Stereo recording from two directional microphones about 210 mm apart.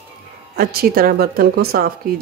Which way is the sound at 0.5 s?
45° right (ahead or behind).